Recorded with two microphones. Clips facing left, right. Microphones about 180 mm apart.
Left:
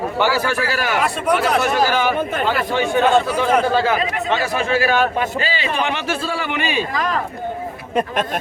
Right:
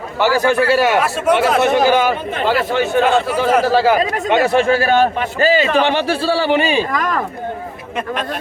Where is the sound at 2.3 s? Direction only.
45° left (ahead or behind).